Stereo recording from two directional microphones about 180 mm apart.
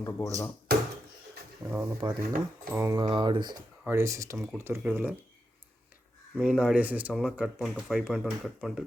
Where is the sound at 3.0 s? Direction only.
25° right (ahead or behind); by 5.1 s 10° right (ahead or behind).